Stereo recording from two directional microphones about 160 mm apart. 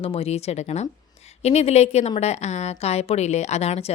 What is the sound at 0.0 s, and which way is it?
A woman's voice, 40° left (ahead or behind).